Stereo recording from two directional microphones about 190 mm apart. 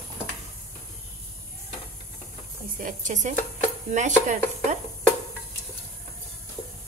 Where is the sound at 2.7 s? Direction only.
40° right (ahead or behind).